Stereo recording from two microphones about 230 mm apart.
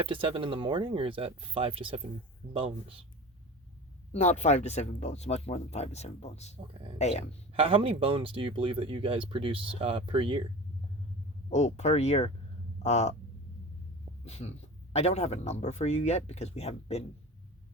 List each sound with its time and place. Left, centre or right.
0.0 s speech: right
4.1 s speech: left
7.5 s speech: right
11.5 s speech: left
14.3 s speech: left